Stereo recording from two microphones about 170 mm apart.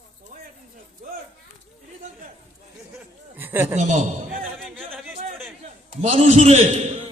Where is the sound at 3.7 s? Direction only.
45° right (ahead or behind).